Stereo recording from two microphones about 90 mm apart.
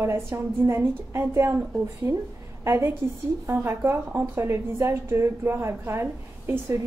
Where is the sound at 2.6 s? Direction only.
30° right (ahead or behind).